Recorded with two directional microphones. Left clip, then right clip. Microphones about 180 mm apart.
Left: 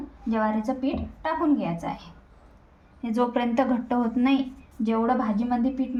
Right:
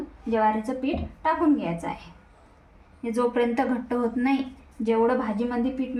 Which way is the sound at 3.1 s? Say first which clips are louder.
Even; 45° left (ahead or behind).